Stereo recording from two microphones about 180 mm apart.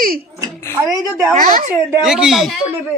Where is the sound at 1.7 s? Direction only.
10° right (ahead or behind).